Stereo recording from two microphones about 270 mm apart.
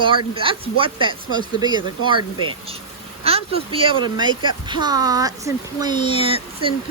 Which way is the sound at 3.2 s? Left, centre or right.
Right.